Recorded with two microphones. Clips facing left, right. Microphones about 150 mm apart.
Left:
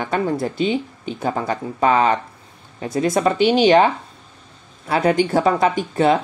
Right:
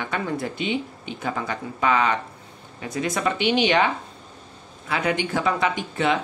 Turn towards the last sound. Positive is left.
turn(degrees=40)  # may be behind; listen again after turning